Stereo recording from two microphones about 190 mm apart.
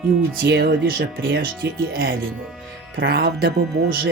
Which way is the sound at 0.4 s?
60° right (ahead or behind).